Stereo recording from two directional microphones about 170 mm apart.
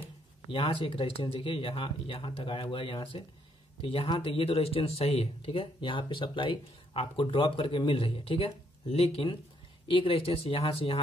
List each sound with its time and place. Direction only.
0.5 s speech: 30° left (ahead or behind)